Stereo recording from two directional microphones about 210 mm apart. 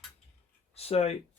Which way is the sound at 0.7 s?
30° left (ahead or behind).